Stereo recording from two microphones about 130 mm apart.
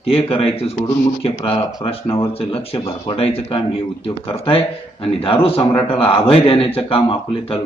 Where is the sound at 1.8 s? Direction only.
40° left (ahead or behind).